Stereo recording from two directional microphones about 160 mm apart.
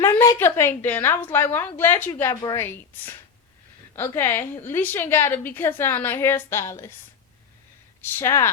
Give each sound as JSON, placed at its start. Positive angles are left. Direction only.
{"t": 0.0, "sound": "a woman's voice", "side_deg": 15}
{"t": 2.3, "sound": "a woman's voice", "side_deg": 25}
{"t": 2.6, "sound": "a woman's voice", "side_deg": 15}
{"t": 8.2, "sound": "a woman's voice", "side_deg": 15}